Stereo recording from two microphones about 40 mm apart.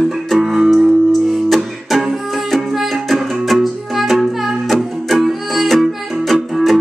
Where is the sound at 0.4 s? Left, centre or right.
Centre.